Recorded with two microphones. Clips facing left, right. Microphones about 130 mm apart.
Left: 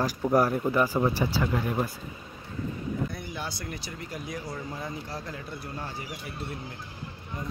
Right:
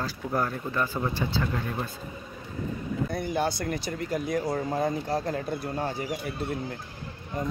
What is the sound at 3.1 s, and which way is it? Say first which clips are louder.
Speech: right 9 dB; 50° right (ahead or behind).